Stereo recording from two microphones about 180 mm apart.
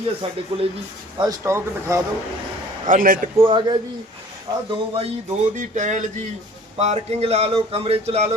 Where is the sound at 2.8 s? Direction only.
50° right (ahead or behind).